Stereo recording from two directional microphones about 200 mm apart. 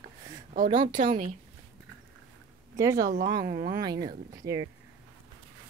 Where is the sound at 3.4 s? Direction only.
45° right (ahead or behind).